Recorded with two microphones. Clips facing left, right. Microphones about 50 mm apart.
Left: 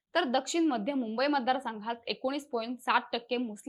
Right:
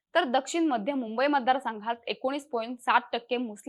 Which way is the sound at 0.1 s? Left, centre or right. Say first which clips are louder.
Right 3 dB; centre.